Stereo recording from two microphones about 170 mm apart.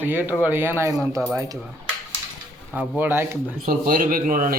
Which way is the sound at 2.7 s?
10° right (ahead or behind).